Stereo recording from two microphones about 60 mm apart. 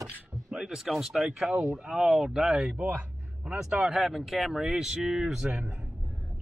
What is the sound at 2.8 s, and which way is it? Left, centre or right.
Speech, right.